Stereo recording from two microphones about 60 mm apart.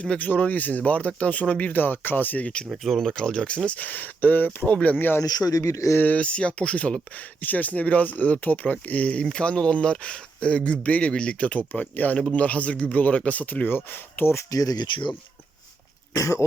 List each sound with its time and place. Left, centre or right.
0.0 s speech: left
2.7 s speech: centre
3.7 s speech: left
5.2 s speech: left
6.0 s speech: left
14.5 s speech: left
16.1 s speech: left